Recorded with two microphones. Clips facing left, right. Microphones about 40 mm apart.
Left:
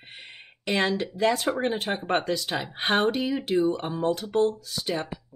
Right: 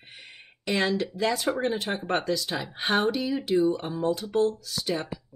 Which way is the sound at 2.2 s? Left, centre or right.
Left.